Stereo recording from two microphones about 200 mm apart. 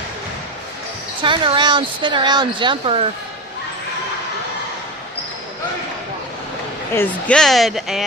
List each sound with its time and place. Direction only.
1.2 s speech: 25° right (ahead or behind)
6.9 s speech: 10° left (ahead or behind)